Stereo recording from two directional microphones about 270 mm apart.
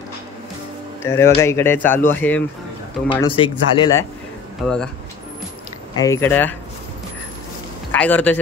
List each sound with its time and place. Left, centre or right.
1.0 s speech: centre
3.1 s speech: centre
5.9 s speech: centre
7.9 s speech: centre